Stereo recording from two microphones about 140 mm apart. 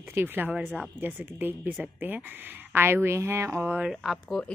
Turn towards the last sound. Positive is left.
turn(degrees=0)  # may be behind; listen again after turning